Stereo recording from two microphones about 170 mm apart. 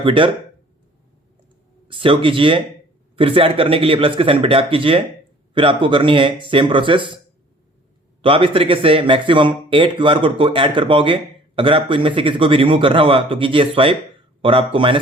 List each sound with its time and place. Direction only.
0.0 s speech: 30° right (ahead or behind)
1.9 s speech: 30° right (ahead or behind)
8.2 s speech: 30° right (ahead or behind)